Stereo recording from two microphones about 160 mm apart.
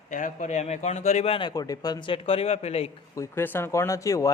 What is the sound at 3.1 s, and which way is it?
Speech, 15° left (ahead or behind).